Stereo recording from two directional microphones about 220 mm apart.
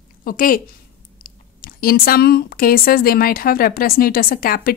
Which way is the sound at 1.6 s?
40° left (ahead or behind).